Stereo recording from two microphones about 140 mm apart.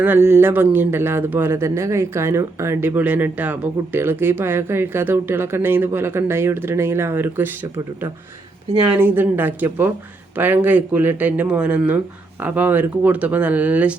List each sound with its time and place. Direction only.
0.0 s a man's voice: 15° right (ahead or behind)
9.0 s a man's voice: 15° right (ahead or behind)